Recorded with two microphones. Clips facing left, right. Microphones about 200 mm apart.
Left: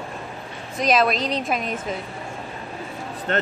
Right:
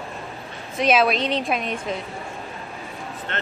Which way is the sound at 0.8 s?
Centre (ahead or behind).